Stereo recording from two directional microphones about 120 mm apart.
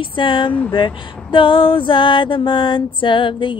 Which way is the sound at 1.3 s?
45° left (ahead or behind).